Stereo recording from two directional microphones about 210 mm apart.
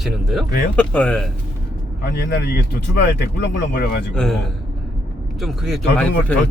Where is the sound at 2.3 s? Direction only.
55° left (ahead or behind).